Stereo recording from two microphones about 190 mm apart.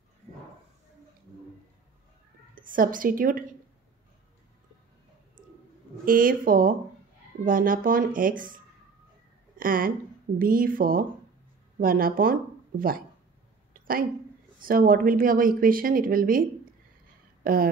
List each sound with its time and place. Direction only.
2.5 s speech: 45° right (ahead or behind)
6.0 s speech: 45° right (ahead or behind)
9.6 s speech: 45° right (ahead or behind)
13.7 s a sound: 50° right (ahead or behind)
14.6 s speech: 50° right (ahead or behind)
17.4 s a sound: 50° right (ahead or behind)